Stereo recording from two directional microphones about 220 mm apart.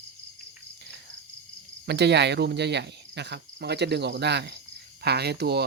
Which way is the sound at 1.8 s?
50° right (ahead or behind).